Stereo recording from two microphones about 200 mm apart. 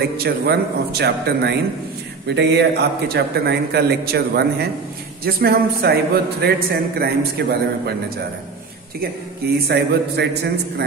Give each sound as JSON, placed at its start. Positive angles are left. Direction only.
{"t": 0.0, "sound": "a man's voice", "side_deg": -55}
{"t": 9.7, "sound": "a man's voice", "side_deg": -55}